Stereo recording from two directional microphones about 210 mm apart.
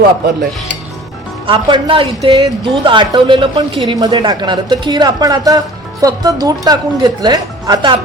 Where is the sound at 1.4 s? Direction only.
25° right (ahead or behind).